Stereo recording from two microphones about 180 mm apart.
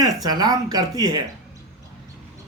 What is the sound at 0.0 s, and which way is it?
A man's voice, 20° right (ahead or behind).